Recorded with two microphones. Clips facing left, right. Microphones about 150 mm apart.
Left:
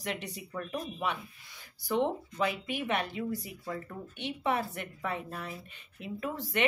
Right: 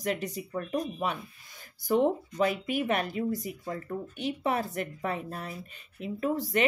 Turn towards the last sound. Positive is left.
turn(degrees=-40)  # may be behind; listen again after turning